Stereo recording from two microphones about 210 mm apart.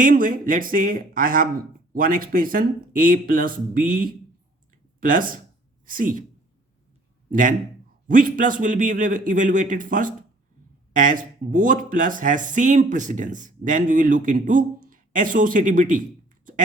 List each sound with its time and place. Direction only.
0.0 s a woman's voice: 40° right (ahead or behind)
7.3 s a man's voice: 40° right (ahead or behind)